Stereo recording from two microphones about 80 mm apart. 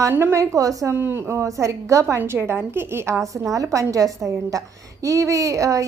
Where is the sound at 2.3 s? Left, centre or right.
Right.